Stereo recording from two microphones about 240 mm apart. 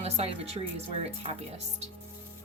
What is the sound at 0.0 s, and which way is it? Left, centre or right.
Speech, right.